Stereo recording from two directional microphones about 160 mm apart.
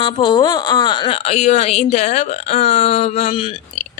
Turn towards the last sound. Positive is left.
turn(degrees=35)  # may be behind; listen again after turning